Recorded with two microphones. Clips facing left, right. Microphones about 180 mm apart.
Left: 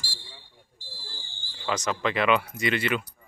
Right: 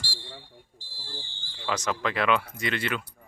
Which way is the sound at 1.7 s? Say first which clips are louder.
Left 1 dB; centre (ahead or behind).